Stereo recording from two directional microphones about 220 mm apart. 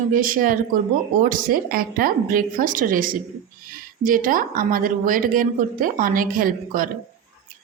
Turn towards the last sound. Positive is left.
turn(degrees=-40)  # may be behind; listen again after turning